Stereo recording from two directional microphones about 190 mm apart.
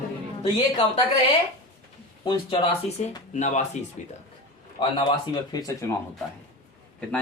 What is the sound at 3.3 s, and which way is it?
Speech, 40° left (ahead or behind).